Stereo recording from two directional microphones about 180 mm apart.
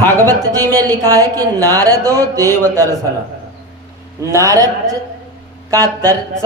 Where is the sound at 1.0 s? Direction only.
20° right (ahead or behind).